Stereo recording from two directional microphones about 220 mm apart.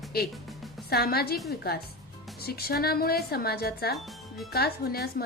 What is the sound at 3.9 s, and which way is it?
Speech, centre (ahead or behind).